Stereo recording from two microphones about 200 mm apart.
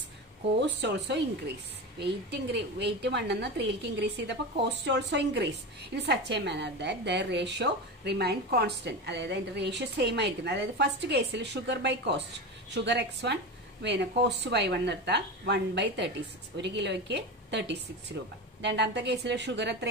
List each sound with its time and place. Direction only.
0.6 s a woman's voice: 60° right (ahead or behind)